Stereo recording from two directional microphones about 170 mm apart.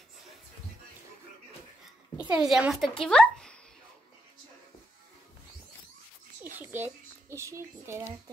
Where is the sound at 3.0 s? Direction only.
5° left (ahead or behind).